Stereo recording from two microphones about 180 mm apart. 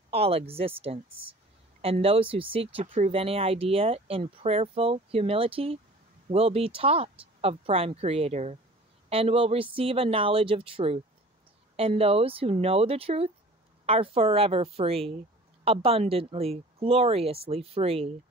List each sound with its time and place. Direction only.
0.1 s speech: 35° right (ahead or behind)